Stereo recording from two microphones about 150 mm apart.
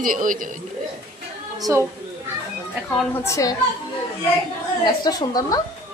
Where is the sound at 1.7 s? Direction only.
20° right (ahead or behind).